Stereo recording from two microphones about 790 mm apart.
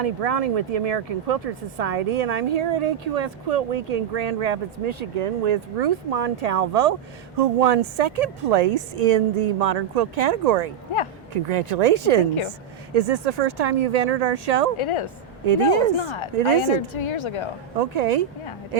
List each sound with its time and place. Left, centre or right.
0.0 s speech: right
14.8 s a woman's voice: left
17.7 s speech: right